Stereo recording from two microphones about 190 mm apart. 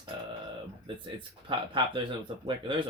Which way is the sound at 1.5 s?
25° right (ahead or behind).